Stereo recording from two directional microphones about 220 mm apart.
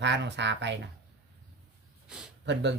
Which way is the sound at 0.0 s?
55° right (ahead or behind).